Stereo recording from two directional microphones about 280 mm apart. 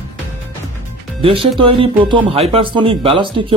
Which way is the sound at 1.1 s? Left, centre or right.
Centre.